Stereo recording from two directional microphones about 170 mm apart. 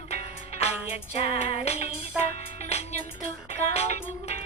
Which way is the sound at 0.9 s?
35° left (ahead or behind).